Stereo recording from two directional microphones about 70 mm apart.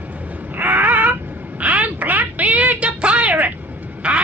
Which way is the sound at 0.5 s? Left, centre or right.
Right.